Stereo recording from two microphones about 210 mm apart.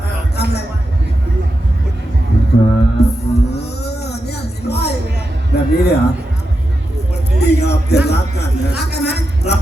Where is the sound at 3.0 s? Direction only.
50° left (ahead or behind).